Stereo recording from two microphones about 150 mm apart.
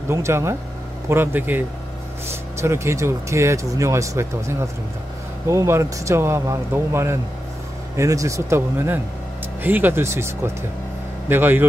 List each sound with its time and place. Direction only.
0.1 s speech: 20° right (ahead or behind)
2.6 s speech: 20° right (ahead or behind)